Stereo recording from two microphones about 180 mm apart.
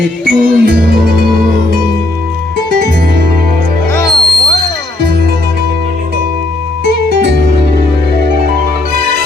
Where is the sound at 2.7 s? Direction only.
50° right (ahead or behind).